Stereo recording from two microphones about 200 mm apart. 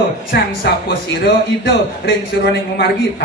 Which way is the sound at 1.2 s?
60° left (ahead or behind).